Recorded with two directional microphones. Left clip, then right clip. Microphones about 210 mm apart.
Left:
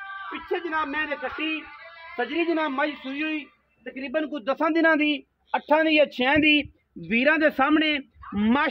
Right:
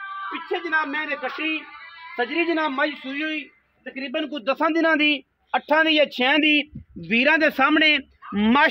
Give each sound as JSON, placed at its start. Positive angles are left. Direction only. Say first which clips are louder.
{"t": 0.5, "sound": "a man's voice", "louder": "right 3 dB", "side_deg": -5}